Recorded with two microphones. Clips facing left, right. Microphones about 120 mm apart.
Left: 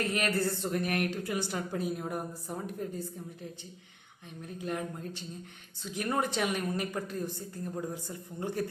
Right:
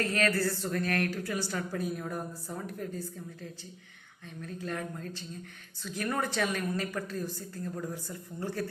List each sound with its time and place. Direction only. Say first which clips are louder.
0.0 s a woman's voice: right 1 dB; 20° left (ahead or behind)